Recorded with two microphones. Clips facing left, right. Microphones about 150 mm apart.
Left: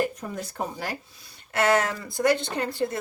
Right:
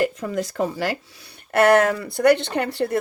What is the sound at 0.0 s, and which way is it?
Speech, 90° right.